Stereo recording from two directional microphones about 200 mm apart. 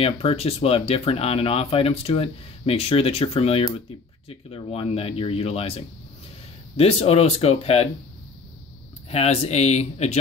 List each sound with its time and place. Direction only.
0.0 s speech: 30° left (ahead or behind)
9.1 s speech: 30° left (ahead or behind)